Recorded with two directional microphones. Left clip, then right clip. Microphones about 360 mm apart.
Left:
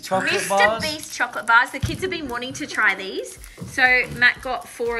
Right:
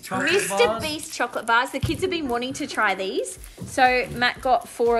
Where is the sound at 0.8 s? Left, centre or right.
Centre.